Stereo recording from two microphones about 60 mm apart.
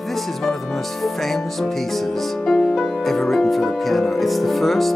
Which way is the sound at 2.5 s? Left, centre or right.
Centre.